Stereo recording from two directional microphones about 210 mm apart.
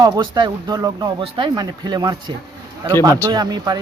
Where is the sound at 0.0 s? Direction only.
20° right (ahead or behind).